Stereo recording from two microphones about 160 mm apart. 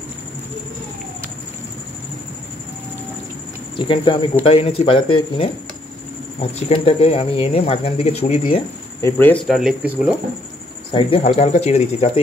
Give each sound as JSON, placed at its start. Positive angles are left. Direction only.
{"t": 3.7, "sound": "speech", "side_deg": 30}
{"t": 6.7, "sound": "speech", "side_deg": 40}
{"t": 9.0, "sound": "speech", "side_deg": 10}
{"t": 9.5, "sound": "speech", "side_deg": -5}
{"t": 10.9, "sound": "speech", "side_deg": 35}